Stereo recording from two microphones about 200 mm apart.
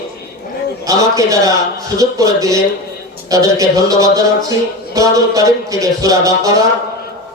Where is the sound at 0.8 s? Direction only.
15° right (ahead or behind).